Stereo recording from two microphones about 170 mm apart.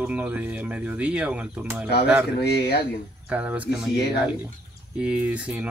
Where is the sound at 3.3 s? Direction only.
10° right (ahead or behind).